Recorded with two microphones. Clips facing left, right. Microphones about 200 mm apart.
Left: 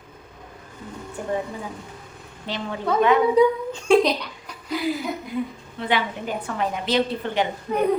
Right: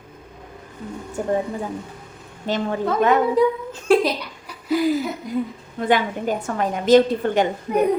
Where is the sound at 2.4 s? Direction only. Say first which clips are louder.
Right 4 dB; 45° right (ahead or behind).